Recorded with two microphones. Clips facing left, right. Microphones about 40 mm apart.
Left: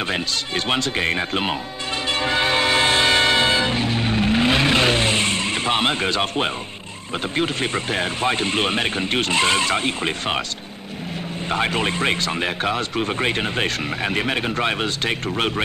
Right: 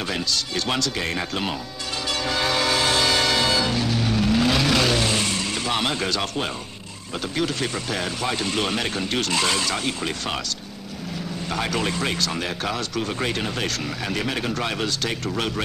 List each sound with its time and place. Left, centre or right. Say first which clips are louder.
0.1 s speech: left 2 dB; left
2.0 s music: left 4 dB; left
7.3 s speech: left 3 dB; left
11.5 s speech: left 4 dB; left